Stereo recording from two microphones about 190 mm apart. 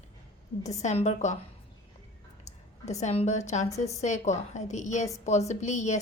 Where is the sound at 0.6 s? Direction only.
35° left (ahead or behind).